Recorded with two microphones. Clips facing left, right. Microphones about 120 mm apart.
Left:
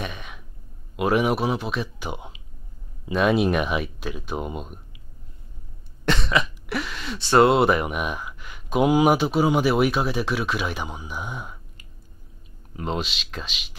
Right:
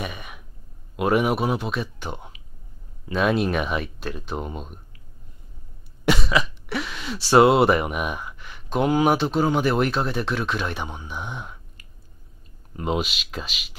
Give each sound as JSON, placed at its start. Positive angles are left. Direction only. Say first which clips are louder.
{"t": 0.0, "sound": "throat clearing", "louder": "right 1 dB", "side_deg": -5}
{"t": 0.9, "sound": "speech", "louder": "even", "side_deg": 0}
{"t": 6.0, "sound": "speech", "louder": "right 1 dB", "side_deg": -5}
{"t": 12.7, "sound": "speech", "louder": "right 3 dB", "side_deg": -5}